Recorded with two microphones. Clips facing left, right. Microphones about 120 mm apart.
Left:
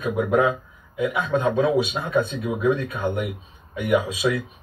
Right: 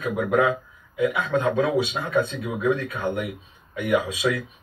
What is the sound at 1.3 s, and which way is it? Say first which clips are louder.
Speech: left 4 dB; 25° left (ahead or behind).